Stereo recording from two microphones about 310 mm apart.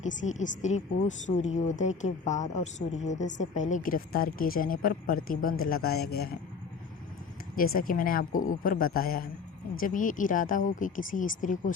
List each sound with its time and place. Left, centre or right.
0.0 s a woman's voice: left
7.5 s a woman's voice: left